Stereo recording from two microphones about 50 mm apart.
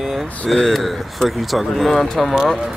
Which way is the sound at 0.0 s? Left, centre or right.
Centre.